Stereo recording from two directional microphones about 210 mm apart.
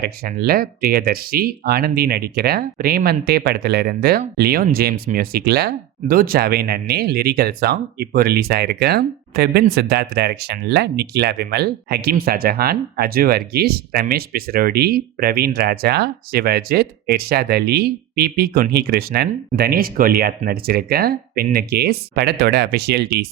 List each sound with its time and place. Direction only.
0.0 s speech: 50° right (ahead or behind)